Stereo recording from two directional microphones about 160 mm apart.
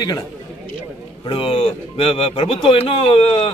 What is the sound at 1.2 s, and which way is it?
A man's voice, 35° left (ahead or behind).